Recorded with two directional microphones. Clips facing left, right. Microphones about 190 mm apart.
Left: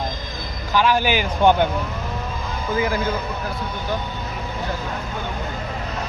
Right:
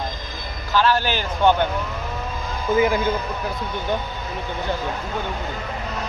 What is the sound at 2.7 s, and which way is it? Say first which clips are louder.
Speech: right 4 dB; 20° right (ahead or behind).